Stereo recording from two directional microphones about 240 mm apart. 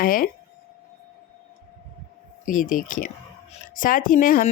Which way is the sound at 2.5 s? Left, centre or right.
Left.